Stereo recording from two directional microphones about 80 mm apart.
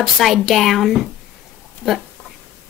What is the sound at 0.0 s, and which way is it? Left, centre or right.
Speech, centre.